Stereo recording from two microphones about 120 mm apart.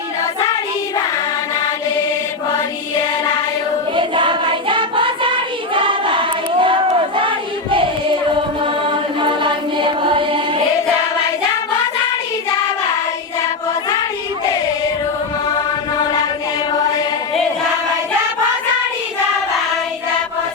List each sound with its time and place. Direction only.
3.9 s child singing: 45° right (ahead or behind)
7.2 s a sound: 45° right (ahead or behind)
9.2 s music: 45° right (ahead or behind)